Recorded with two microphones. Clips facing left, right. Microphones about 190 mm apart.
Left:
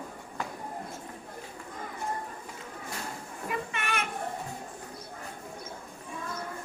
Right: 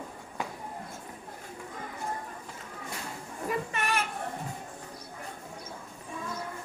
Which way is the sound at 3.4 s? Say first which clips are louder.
Right 3 dB; 40° right (ahead or behind).